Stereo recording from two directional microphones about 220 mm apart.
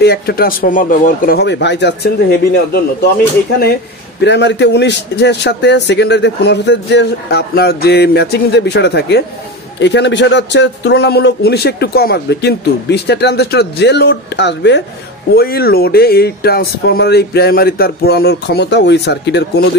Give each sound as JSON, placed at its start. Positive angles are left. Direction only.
{"t": 0.0, "sound": "a man's voice", "side_deg": 45}
{"t": 4.2, "sound": "a man's voice", "side_deg": 50}